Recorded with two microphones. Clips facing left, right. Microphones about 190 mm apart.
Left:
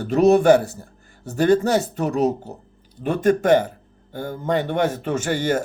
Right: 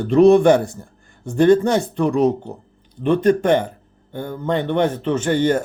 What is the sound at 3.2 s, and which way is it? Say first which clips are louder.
Speech: left 1 dB; 45° left (ahead or behind).